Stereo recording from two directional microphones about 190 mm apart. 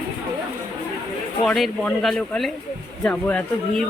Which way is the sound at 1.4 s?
Centre (ahead or behind).